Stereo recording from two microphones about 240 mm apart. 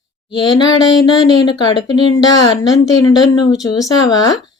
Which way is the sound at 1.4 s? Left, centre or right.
Centre.